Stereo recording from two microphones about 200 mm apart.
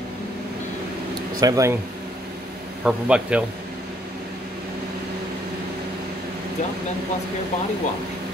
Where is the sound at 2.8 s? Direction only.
5° right (ahead or behind).